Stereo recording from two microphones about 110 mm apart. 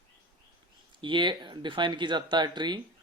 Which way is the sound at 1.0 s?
45° right (ahead or behind).